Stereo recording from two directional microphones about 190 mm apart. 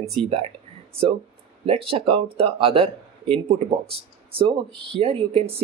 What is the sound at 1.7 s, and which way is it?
Speech, 30° right (ahead or behind).